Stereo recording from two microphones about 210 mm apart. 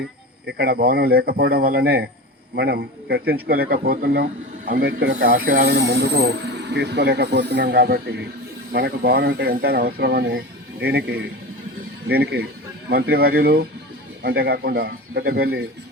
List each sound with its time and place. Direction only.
0.0 s speech: 50° right (ahead or behind)